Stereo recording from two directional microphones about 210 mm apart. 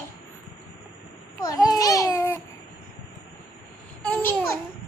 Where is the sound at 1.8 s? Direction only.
15° left (ahead or behind).